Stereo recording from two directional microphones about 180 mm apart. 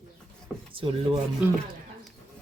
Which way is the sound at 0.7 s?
30° right (ahead or behind).